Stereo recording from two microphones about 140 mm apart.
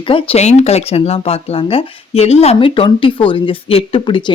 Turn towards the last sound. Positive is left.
turn(degrees=35)  # may be behind; listen again after turning